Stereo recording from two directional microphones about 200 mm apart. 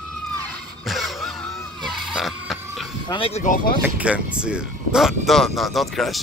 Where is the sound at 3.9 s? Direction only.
5° right (ahead or behind).